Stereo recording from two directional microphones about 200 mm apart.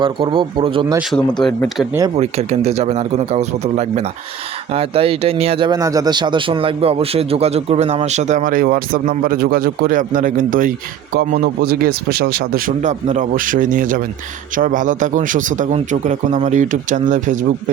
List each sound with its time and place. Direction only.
0.0 s speech: 25° right (ahead or behind)
1.1 s speech: 5° left (ahead or behind)
2.1 s speech: 30° right (ahead or behind)